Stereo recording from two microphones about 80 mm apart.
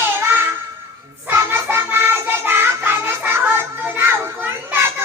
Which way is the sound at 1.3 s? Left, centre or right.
Right.